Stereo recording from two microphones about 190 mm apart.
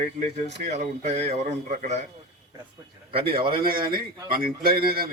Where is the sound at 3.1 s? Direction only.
55° right (ahead or behind).